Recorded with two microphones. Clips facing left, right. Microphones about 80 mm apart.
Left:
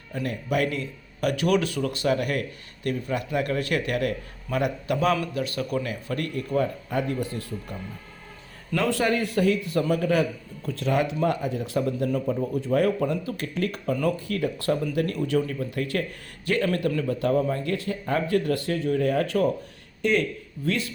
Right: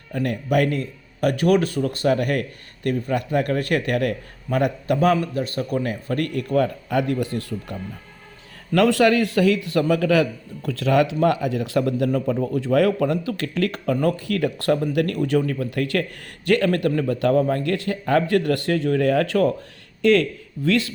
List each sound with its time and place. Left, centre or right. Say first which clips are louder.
0.1 s a man's voice: right 5 dB; right
12.5 s speech: right 4 dB; right
13.9 s a man's voice: right 3 dB; right
14.2 s speech: right 4 dB; right
16.6 s a man's voice: right 4 dB; right
17.2 s speech: right 5 dB; right
20.0 s speech: right 6 dB; right